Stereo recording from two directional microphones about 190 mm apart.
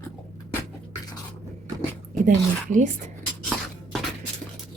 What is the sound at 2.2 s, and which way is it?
Speech, 40° right (ahead or behind).